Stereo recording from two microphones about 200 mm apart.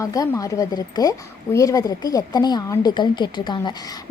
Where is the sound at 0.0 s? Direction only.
15° left (ahead or behind).